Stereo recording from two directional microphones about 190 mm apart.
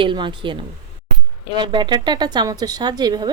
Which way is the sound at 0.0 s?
25° right (ahead or behind).